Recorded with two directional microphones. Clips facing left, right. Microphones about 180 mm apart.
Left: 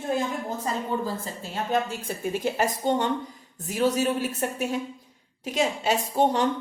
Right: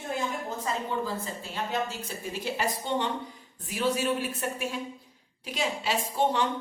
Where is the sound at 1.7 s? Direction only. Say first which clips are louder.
Left 7 dB; 50° left (ahead or behind).